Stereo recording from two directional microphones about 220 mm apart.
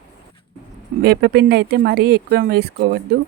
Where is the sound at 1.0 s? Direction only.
45° right (ahead or behind).